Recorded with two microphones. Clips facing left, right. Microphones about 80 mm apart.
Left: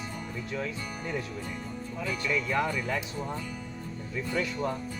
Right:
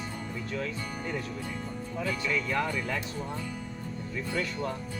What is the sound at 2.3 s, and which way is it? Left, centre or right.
Speech, centre.